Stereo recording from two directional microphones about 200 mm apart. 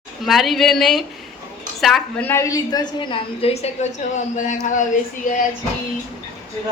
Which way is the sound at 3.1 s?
30° left (ahead or behind).